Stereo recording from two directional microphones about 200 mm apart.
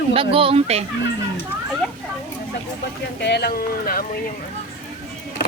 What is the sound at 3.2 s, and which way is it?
Speech, 55° left (ahead or behind).